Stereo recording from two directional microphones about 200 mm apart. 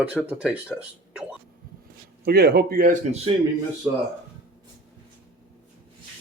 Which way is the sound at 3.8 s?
5° right (ahead or behind).